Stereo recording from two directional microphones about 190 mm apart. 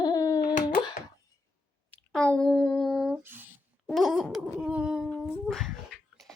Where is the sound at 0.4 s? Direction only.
45° left (ahead or behind).